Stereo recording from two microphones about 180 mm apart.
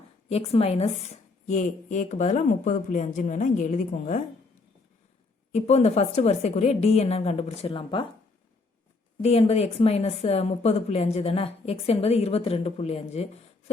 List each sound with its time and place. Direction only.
0.3 s a woman's voice: 35° left (ahead or behind)
5.5 s speech: 40° left (ahead or behind)
9.2 s speech: 35° left (ahead or behind)